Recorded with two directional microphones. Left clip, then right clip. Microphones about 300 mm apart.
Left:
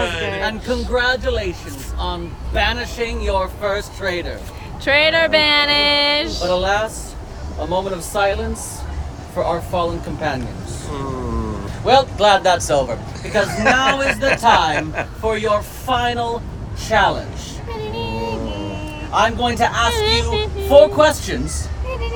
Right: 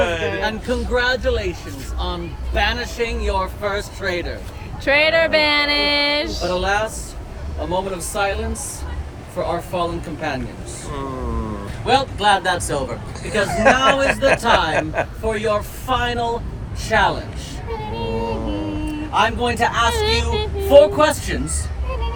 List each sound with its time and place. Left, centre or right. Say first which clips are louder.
0.4 s a man's voice: left 1 dB; centre
12.1 s speech: left 3 dB; left
13.2 s a man's voice: right 1 dB; centre
17.9 s vehicle: right 1 dB; centre
19.1 s a man's voice: left 2 dB; centre